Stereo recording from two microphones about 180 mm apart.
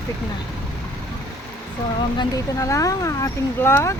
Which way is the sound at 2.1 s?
20° left (ahead or behind).